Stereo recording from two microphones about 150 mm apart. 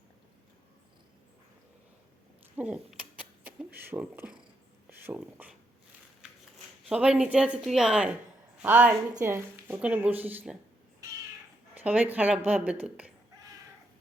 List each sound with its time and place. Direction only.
2.6 s a sound: 10° right (ahead or behind)
4.9 s speech: 15° right (ahead or behind)
6.8 s a woman's voice: 5° right (ahead or behind)
11.7 s a woman's voice: 10° right (ahead or behind)